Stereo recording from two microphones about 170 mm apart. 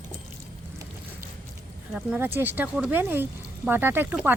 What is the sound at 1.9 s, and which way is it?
Speech, 5° right (ahead or behind).